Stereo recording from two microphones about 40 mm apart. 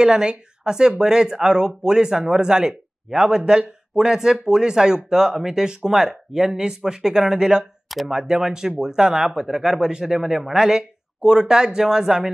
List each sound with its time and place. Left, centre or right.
0.0 s speech: centre